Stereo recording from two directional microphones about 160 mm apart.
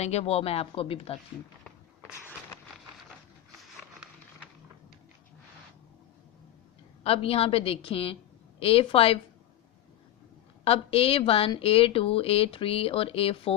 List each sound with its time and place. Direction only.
0.0 s speech: 40° left (ahead or behind)
7.0 s a woman's voice: 35° left (ahead or behind)
10.6 s speech: 35° left (ahead or behind)